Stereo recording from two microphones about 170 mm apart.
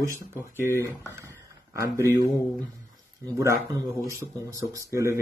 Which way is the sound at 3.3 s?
15° right (ahead or behind).